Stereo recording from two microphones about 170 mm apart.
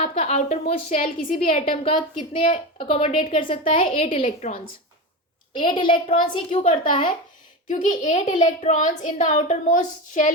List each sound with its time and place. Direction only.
0.0 s a woman's voice: 35° left (ahead or behind); by 1.4 s 55° left (ahead or behind)
1.4 s a woman's voice: 35° left (ahead or behind)
5.5 s a woman's voice: 30° left (ahead or behind)
7.7 s a child's voice: 50° left (ahead or behind)